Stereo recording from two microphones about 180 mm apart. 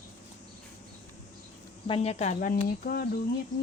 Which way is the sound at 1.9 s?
35° left (ahead or behind).